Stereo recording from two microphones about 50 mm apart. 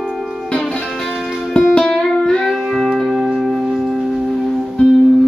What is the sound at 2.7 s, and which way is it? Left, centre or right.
Music, centre.